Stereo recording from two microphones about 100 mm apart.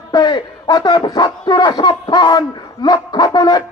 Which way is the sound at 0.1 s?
45° left (ahead or behind).